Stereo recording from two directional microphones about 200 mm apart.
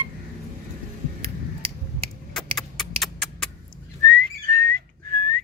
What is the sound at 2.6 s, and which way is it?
Horse, centre (ahead or behind).